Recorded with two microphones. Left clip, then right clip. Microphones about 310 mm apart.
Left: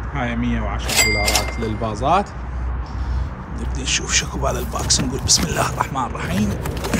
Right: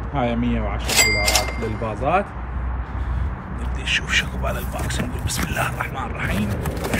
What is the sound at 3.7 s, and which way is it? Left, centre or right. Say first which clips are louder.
Speech: even; centre.